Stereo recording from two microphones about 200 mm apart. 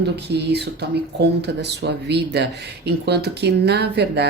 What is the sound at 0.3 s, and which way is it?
Speech, 55° right (ahead or behind).